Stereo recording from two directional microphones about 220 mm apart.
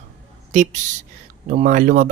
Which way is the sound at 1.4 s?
35° right (ahead or behind).